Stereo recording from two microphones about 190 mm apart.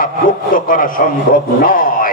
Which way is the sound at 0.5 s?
45° left (ahead or behind).